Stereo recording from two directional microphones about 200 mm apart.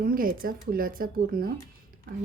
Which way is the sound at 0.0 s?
45° right (ahead or behind).